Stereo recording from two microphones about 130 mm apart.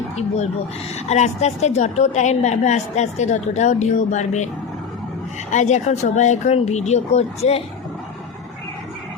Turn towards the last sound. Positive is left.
turn(degrees=55)  # may be behind; listen again after turning